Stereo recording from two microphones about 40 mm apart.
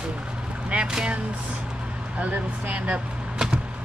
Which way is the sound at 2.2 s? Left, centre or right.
Right.